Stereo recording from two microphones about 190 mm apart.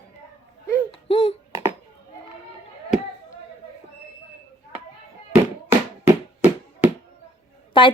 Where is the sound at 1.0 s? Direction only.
30° left (ahead or behind).